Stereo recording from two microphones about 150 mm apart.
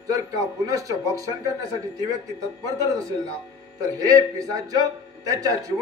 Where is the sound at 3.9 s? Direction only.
25° right (ahead or behind).